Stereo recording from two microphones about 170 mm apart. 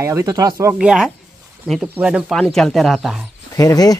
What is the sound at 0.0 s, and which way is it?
Speech, 15° right (ahead or behind).